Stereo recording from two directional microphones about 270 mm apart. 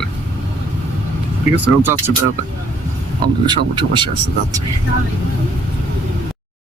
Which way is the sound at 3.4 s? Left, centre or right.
Centre.